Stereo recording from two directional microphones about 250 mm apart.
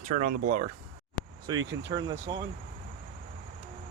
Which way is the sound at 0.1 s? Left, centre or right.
Right.